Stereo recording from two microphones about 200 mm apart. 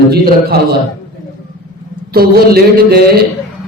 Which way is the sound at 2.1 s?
50° right (ahead or behind).